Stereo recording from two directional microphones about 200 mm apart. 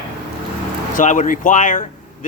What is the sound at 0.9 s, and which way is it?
Speech, 40° left (ahead or behind).